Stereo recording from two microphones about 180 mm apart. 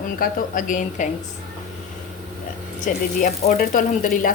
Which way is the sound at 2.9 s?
45° left (ahead or behind).